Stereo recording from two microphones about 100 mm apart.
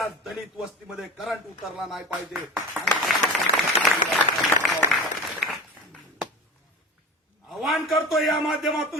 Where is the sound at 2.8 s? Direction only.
15° right (ahead or behind).